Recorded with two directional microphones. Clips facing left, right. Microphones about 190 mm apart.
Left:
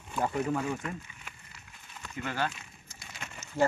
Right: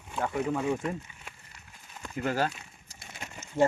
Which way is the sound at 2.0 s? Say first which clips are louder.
Right 4 dB; 40° right (ahead or behind).